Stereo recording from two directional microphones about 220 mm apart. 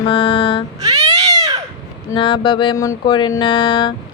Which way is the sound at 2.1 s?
20° left (ahead or behind).